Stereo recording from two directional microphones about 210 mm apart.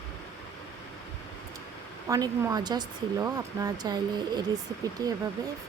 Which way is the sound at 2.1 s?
15° right (ahead or behind).